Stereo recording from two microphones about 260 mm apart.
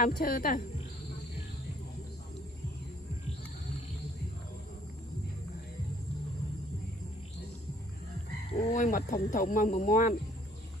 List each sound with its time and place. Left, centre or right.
0.0 s speech: left
8.5 s speech: left